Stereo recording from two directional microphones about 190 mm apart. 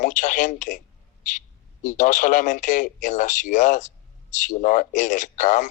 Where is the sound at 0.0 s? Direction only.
40° left (ahead or behind).